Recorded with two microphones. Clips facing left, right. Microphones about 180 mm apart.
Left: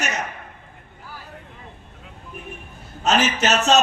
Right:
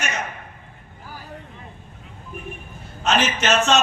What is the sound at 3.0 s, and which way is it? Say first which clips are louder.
Speech: left 1 dB; 40° left (ahead or behind).